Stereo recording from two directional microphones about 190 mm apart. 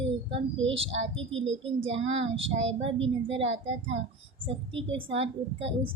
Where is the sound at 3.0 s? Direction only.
30° right (ahead or behind).